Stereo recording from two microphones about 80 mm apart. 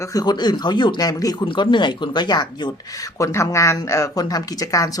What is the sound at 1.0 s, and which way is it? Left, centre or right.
Speech, left.